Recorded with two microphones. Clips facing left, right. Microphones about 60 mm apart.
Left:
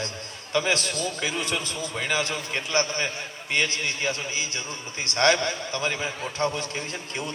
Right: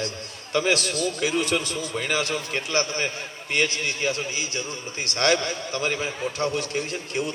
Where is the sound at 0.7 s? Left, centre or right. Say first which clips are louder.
Right 3 dB; left.